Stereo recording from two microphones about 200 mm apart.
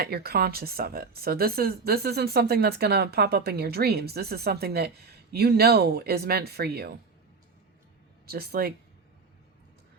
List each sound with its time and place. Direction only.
0.0 s speech: 50° right (ahead or behind)
8.3 s speech: 50° right (ahead or behind)